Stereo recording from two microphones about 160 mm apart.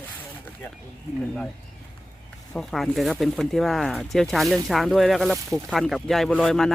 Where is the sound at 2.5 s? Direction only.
5° left (ahead or behind).